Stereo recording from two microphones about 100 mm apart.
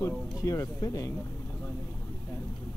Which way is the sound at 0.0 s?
35° left (ahead or behind).